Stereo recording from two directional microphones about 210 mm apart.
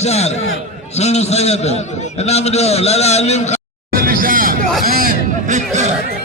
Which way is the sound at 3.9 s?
45° right (ahead or behind).